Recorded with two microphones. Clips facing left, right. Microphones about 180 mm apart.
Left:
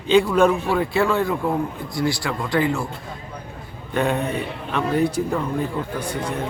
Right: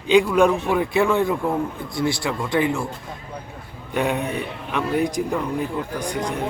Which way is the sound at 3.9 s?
10° right (ahead or behind).